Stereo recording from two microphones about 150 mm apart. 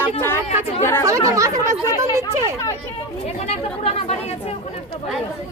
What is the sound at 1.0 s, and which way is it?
Speech, 20° right (ahead or behind).